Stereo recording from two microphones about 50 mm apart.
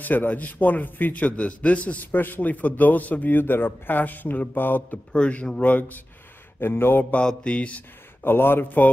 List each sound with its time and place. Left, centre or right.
0.0 s a man's voice: left
2.0 s a man's voice: left
4.9 s a man's voice: left
6.6 s a man's voice: left
7.2 s a man's voice: left
8.2 s a man's voice: left